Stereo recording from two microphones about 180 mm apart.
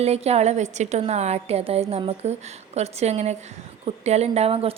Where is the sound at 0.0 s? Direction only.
35° right (ahead or behind).